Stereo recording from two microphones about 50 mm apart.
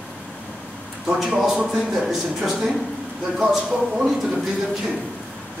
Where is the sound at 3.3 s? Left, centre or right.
Centre.